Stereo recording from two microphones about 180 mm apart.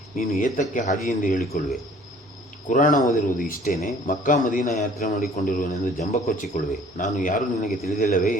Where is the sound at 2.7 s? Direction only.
45° left (ahead or behind).